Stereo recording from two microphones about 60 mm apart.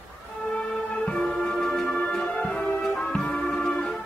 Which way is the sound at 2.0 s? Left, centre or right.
Centre.